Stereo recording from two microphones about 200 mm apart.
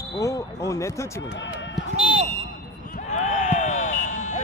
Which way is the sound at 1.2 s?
65° left (ahead or behind).